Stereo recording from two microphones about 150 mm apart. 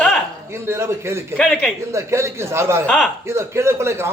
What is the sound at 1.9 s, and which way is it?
A man's voice, 20° right (ahead or behind).